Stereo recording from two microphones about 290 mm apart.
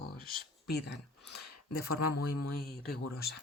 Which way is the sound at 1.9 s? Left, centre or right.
Left.